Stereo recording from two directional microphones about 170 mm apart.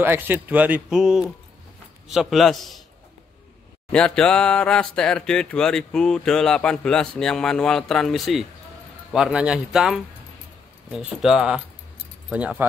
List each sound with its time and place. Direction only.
0.0 s speech: 10° right (ahead or behind)
3.9 s speech: 5° left (ahead or behind)